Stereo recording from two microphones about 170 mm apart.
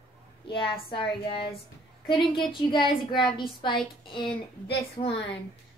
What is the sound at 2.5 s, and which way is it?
Speech, 30° left (ahead or behind).